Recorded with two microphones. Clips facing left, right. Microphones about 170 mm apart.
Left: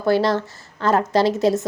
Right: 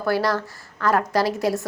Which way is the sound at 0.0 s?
25° left (ahead or behind).